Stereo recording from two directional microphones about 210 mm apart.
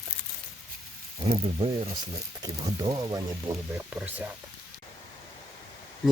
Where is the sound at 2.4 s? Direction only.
20° right (ahead or behind).